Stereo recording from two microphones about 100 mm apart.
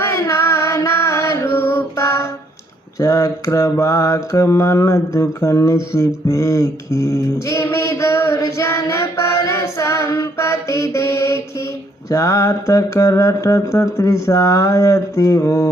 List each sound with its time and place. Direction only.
0.0 s music: 25° left (ahead or behind)
3.0 s mantra: 30° left (ahead or behind)
12.1 s music: 30° left (ahead or behind)